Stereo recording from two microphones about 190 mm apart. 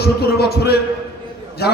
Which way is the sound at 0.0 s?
55° left (ahead or behind).